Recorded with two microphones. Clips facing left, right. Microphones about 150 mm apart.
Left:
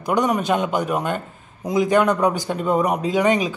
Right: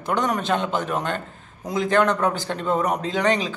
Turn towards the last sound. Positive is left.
turn(degrees=10)  # may be behind; listen again after turning